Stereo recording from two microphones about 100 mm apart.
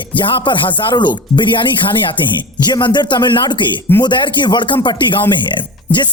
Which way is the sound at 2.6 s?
45° left (ahead or behind).